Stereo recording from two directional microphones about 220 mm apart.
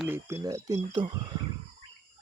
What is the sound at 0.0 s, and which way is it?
Speech, 10° right (ahead or behind).